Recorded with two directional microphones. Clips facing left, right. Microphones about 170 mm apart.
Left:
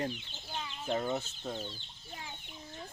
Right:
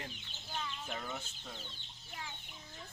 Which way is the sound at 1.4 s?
50° left (ahead or behind).